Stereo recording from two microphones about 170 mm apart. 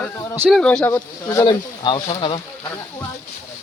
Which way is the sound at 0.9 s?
25° left (ahead or behind).